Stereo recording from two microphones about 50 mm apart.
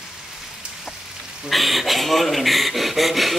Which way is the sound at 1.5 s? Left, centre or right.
Centre.